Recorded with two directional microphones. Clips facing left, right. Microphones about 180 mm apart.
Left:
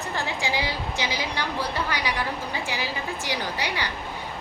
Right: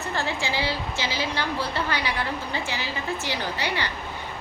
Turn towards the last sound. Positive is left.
turn(degrees=10)  # may be behind; listen again after turning